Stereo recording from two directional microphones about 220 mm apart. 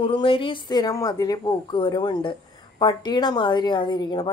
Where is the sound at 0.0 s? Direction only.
25° left (ahead or behind).